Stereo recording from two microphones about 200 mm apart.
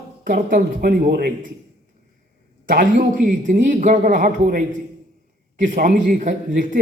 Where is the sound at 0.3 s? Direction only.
45° right (ahead or behind).